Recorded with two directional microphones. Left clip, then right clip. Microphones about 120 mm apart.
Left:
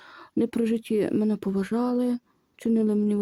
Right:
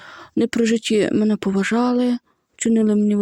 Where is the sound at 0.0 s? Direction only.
35° right (ahead or behind).